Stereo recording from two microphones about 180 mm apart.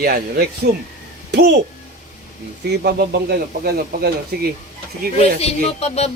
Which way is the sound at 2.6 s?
65° right (ahead or behind).